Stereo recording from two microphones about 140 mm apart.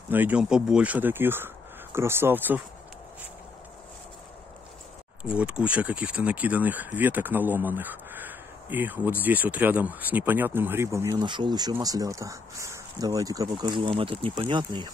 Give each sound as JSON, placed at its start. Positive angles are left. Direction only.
{"t": 0.1, "sound": "speech", "side_deg": -10}
{"t": 5.3, "sound": "speech", "side_deg": -10}
{"t": 11.2, "sound": "speech", "side_deg": -35}